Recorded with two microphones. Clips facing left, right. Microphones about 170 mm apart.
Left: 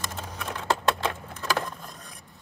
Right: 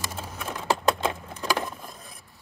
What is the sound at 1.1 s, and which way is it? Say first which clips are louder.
Vehicle: right 1 dB; 15° right (ahead or behind).